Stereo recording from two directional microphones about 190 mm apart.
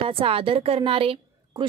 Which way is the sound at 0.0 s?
30° right (ahead or behind).